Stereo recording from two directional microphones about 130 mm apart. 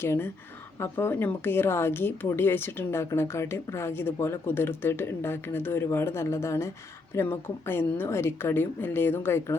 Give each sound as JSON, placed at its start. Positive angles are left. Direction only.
{"t": 0.0, "sound": "a woman's voice", "side_deg": 20}